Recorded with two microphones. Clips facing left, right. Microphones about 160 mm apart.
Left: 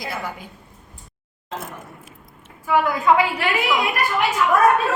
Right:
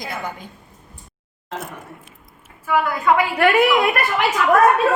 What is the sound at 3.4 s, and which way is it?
Speech, 55° right (ahead or behind).